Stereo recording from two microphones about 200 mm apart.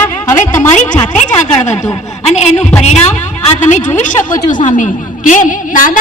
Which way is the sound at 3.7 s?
40° left (ahead or behind).